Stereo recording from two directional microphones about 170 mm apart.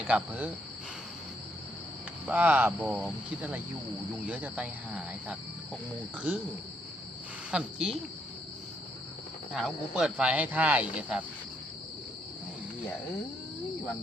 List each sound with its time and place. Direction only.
0.0 s speech: 10° right (ahead or behind)
2.2 s speech: 10° right (ahead or behind)
7.5 s speech: 5° right (ahead or behind)
9.6 s speech: centre (ahead or behind)